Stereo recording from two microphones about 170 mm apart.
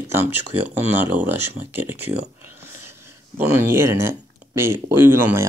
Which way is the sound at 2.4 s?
15° right (ahead or behind).